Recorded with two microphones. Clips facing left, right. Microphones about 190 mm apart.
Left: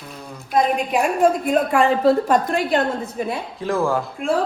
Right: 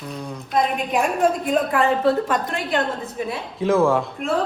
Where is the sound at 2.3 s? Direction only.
45° left (ahead or behind).